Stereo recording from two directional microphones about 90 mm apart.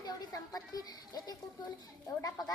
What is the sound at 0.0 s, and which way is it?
A child's voice, 45° left (ahead or behind).